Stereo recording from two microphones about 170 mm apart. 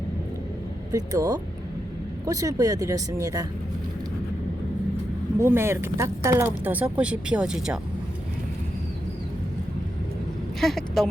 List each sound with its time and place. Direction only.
0.9 s speech: 20° right (ahead or behind)
5.4 s speech: 15° right (ahead or behind)
10.6 s speech: centre (ahead or behind)